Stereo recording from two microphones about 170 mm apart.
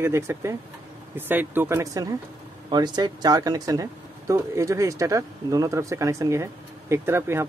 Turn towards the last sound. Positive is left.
turn(degrees=-15)  # may be behind; listen again after turning